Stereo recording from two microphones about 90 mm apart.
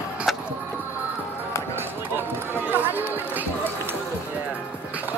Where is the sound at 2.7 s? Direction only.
20° right (ahead or behind).